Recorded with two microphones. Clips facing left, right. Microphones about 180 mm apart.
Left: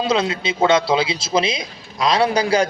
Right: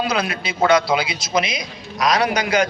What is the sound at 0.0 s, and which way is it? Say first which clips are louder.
A man's voice: left 3 dB; 25° left (ahead or behind).